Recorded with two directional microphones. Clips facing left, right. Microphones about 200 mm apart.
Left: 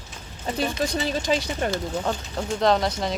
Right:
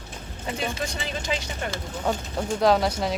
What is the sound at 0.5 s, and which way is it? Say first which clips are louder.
Speech: left 6 dB; 35° left (ahead or behind).